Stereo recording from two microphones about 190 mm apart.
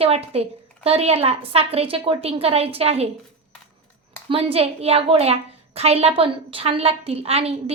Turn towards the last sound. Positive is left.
turn(degrees=-30)  # may be behind; listen again after turning